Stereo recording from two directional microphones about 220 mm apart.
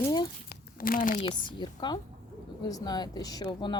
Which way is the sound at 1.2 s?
20° left (ahead or behind).